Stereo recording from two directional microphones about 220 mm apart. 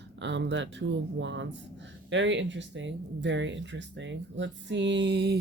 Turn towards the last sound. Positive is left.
turn(degrees=-50)  # may be behind; listen again after turning